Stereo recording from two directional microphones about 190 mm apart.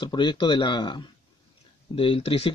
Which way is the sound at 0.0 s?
25° left (ahead or behind).